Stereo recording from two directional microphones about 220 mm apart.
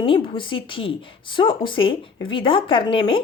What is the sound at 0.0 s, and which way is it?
Speech, 20° left (ahead or behind).